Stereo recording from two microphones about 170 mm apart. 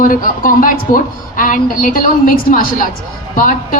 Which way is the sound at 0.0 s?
55° left (ahead or behind).